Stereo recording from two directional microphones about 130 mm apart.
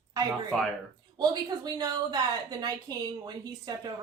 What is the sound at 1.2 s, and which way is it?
Speech, 30° right (ahead or behind).